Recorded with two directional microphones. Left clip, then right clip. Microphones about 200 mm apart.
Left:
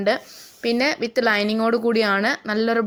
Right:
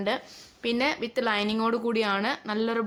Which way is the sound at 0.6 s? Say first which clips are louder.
Left 6 dB; 30° left (ahead or behind).